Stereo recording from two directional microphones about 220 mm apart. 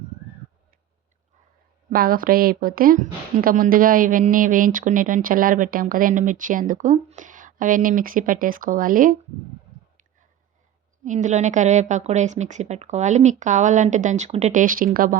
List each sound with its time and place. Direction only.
1.9 s a woman's voice: 40° right (ahead or behind)
11.0 s a woman's voice: 35° right (ahead or behind)